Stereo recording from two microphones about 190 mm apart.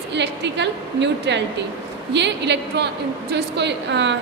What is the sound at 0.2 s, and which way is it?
A woman's voice, 65° right (ahead or behind).